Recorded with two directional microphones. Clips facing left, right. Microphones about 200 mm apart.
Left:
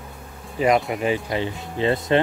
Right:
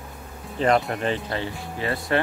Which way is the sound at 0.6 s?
10° left (ahead or behind).